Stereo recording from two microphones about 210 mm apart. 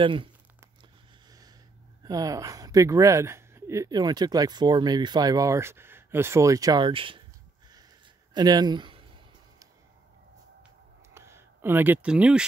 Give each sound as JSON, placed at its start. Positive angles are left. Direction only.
{"t": 0.0, "sound": "speech", "side_deg": -25}
{"t": 2.0, "sound": "speech", "side_deg": -15}
{"t": 8.4, "sound": "speech", "side_deg": -20}
{"t": 11.1, "sound": "speech", "side_deg": -10}